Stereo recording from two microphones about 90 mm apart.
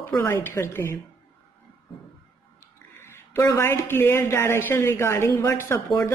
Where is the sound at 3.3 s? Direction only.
30° left (ahead or behind).